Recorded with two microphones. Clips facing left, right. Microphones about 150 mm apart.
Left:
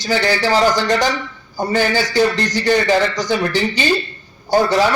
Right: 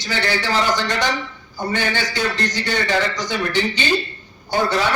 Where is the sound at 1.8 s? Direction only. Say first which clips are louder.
Left 9 dB; 40° left (ahead or behind).